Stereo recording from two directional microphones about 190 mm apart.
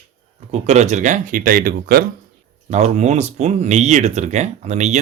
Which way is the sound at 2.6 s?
35° right (ahead or behind).